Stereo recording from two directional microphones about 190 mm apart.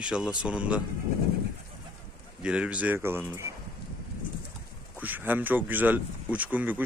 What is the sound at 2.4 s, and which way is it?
Speech, 5° right (ahead or behind).